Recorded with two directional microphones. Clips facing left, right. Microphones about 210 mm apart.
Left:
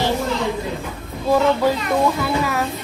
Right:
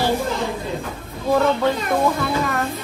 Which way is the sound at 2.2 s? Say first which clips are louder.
Left 1 dB; centre (ahead or behind).